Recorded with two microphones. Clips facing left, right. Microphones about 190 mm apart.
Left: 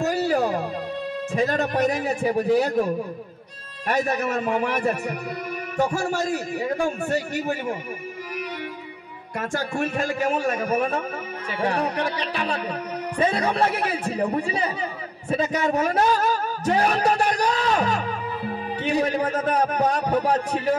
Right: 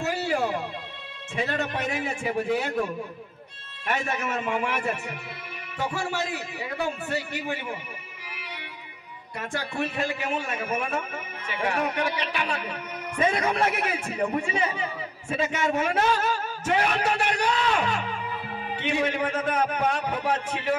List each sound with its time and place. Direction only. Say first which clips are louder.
0.0 s music: left 5 dB; 40° left (ahead or behind)
1.3 s a man's voice: left 5 dB; 40° left (ahead or behind)
9.4 s a man's voice: left 4 dB; 45° left (ahead or behind)